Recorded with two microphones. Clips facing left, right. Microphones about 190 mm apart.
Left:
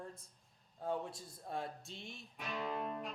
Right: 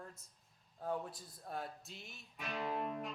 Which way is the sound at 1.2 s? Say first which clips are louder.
Left 2 dB; 25° left (ahead or behind).